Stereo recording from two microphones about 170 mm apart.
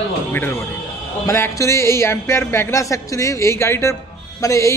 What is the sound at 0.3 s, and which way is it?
A man's voice, 15° left (ahead or behind).